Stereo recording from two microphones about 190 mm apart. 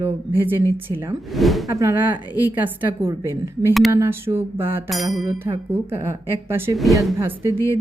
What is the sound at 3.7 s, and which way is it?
Speech, centre (ahead or behind).